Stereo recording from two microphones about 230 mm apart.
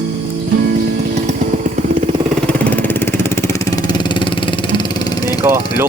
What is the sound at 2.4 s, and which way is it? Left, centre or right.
Vehicle, centre.